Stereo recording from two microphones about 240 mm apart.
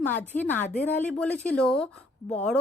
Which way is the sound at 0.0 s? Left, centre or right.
Centre.